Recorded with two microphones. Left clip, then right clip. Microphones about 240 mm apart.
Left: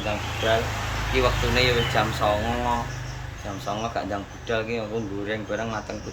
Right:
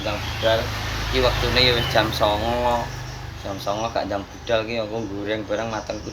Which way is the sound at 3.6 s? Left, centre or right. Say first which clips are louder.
Right 4 dB; centre.